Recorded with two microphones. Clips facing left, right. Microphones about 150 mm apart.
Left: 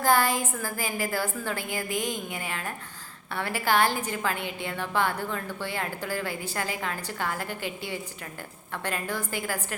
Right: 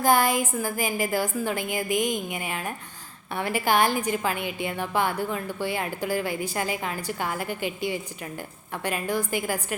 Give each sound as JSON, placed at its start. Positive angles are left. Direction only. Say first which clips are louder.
{"t": 0.0, "sound": "a woman's voice", "louder": "right 2 dB", "side_deg": -15}